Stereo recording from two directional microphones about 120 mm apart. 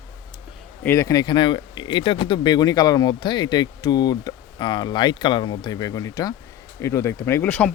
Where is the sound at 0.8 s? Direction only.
25° left (ahead or behind).